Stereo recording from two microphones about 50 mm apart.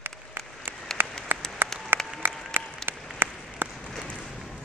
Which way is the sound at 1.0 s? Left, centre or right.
Right.